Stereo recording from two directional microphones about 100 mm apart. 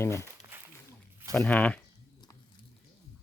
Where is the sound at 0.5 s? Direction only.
20° right (ahead or behind).